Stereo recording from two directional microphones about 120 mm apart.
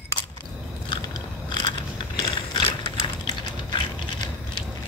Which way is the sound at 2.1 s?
40° left (ahead or behind).